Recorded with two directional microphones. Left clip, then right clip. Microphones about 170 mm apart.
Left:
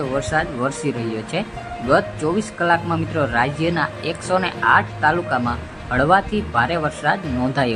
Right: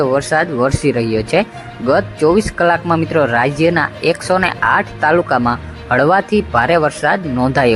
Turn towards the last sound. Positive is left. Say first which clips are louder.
# right 8 dB
turn(degrees=-30)  # may be behind; listen again after turning